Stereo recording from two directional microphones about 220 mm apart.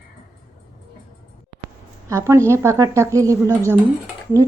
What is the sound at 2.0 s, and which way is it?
Speech, 15° right (ahead or behind).